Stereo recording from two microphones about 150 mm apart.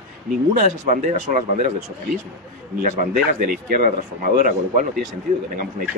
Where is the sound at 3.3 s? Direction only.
75° right (ahead or behind).